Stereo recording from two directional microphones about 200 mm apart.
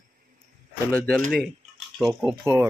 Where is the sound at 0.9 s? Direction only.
5° left (ahead or behind).